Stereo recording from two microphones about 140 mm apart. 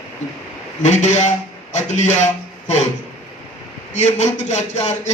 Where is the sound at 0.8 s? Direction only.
60° left (ahead or behind).